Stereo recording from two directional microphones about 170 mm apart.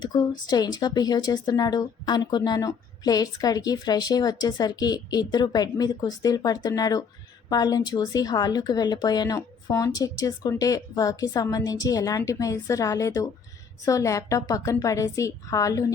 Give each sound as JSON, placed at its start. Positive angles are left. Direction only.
{"t": 0.0, "sound": "speech", "side_deg": 25}